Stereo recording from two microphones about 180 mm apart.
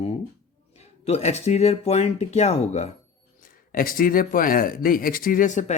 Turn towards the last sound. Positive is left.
turn(degrees=45)  # may be behind; listen again after turning